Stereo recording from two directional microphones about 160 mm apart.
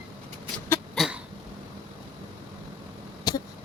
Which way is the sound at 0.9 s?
5° right (ahead or behind).